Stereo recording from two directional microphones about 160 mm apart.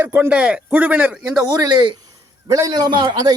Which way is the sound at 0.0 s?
15° right (ahead or behind).